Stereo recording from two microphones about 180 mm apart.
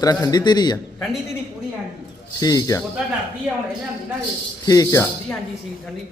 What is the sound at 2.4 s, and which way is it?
Speech, 20° left (ahead or behind).